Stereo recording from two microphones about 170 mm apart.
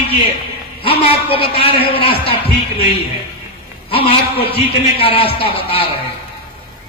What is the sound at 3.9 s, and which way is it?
A man's voice, 35° left (ahead or behind).